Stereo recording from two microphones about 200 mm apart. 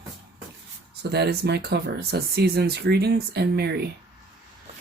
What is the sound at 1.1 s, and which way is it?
Speech, 55° right (ahead or behind).